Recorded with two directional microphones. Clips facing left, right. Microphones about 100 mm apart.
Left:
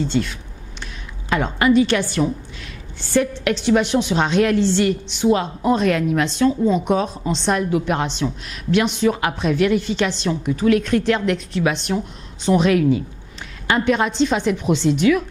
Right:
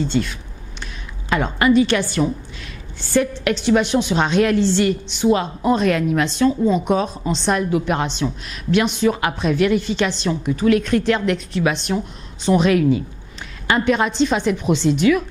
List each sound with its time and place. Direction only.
1.3 s a woman's voice: 15° right (ahead or behind)